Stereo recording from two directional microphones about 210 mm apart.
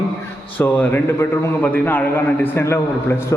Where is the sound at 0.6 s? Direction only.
10° left (ahead or behind).